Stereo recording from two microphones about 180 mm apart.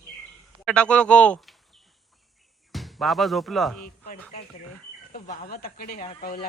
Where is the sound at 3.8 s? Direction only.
55° left (ahead or behind).